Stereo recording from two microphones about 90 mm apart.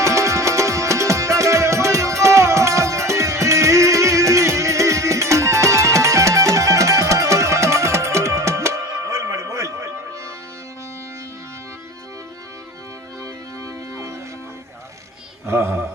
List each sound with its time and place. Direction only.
0.0 s music: 35° right (ahead or behind)
15.4 s mantra: 30° right (ahead or behind)